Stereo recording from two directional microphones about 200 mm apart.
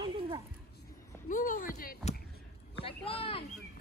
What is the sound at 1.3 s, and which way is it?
Speech, 40° left (ahead or behind).